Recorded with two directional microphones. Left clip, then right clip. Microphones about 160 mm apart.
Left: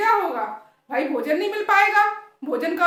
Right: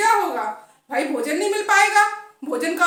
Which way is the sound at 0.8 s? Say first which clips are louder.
Even; 15° left (ahead or behind).